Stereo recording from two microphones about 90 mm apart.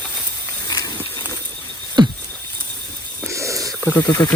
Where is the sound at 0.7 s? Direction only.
45° left (ahead or behind).